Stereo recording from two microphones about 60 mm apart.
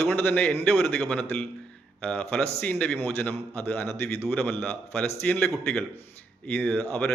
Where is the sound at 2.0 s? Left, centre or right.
Left.